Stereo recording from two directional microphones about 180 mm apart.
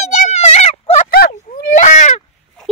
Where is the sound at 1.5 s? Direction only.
50° left (ahead or behind).